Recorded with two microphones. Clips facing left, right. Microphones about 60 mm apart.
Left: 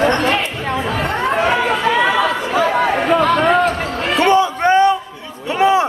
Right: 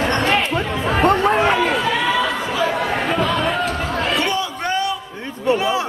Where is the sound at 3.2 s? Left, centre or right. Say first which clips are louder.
Left 5 dB; left.